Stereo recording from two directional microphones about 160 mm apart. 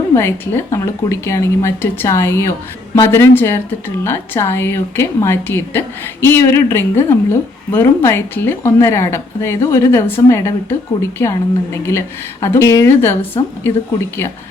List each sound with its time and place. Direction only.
0.1 s a woman's voice: 15° left (ahead or behind)